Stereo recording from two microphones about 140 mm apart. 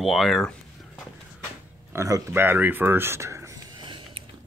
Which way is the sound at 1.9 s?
20° right (ahead or behind).